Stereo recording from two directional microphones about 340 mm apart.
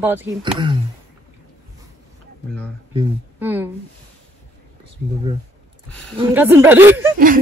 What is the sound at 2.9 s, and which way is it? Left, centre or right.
Speech, centre.